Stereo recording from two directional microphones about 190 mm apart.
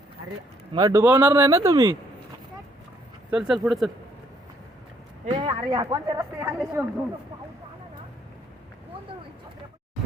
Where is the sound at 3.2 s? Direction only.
5° right (ahead or behind).